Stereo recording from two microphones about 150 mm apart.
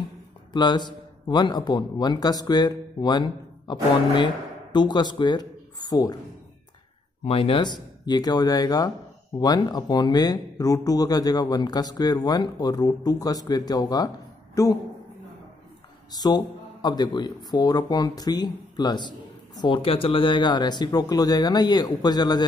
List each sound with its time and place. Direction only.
0.5 s a man's voice: 30° left (ahead or behind)
4.7 s speech: 30° left (ahead or behind)
7.2 s speech: 40° left (ahead or behind)
16.1 s speech: 25° left (ahead or behind)